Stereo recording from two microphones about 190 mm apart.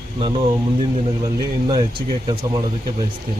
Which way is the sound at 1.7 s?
25° right (ahead or behind).